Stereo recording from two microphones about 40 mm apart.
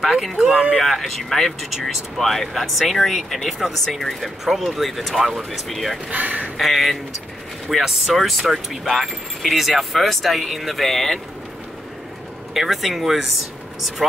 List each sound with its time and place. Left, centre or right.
0.3 s speech: centre
0.7 s speech: centre
6.0 s speech: right
6.6 s speech: centre
12.5 s speech: centre